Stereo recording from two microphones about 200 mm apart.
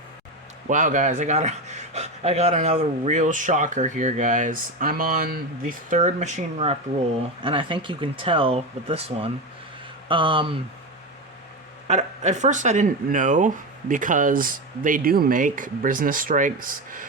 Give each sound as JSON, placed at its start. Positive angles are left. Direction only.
{"t": 0.7, "sound": "speech", "side_deg": -40}
{"t": 11.9, "sound": "speech", "side_deg": -35}